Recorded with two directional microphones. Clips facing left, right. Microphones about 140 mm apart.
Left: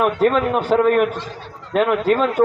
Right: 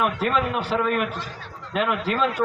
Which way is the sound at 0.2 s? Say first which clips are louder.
Left 7 dB; 45° left (ahead or behind).